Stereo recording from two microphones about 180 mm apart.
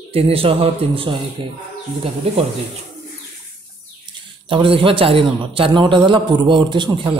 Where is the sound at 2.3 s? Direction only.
30° right (ahead or behind).